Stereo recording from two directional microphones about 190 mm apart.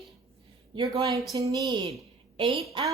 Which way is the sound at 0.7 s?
20° right (ahead or behind).